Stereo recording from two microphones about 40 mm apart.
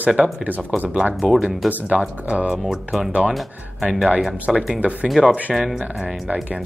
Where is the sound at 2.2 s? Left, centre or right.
Right.